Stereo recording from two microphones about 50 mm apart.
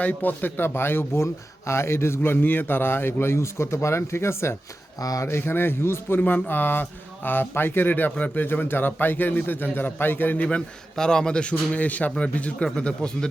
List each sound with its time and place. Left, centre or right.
0.0 s speech: left
1.2 s a man's voice: left
5.4 s speech: left
6.1 s a man's voice: left
10.9 s a man's voice: centre